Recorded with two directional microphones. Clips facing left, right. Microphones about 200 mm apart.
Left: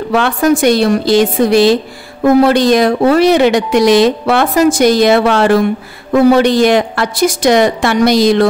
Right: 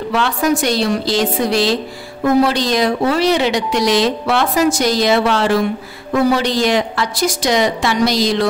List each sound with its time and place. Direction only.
0.1 s a woman's voice: 55° left (ahead or behind)